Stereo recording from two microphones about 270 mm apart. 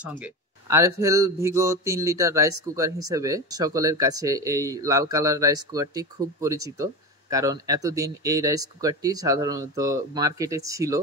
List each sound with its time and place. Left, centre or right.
0.0 s speech: centre